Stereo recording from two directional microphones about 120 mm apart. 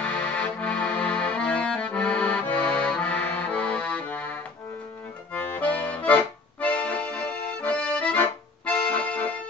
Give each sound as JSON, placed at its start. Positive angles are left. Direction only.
{"t": 0.0, "sound": "accordion", "side_deg": 10}